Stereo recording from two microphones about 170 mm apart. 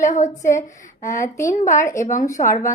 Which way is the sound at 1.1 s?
15° left (ahead or behind).